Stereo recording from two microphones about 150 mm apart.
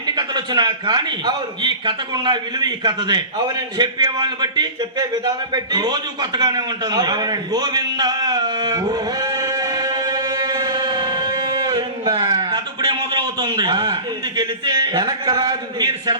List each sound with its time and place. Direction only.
0.2 s a man's voice: 30° right (ahead or behind)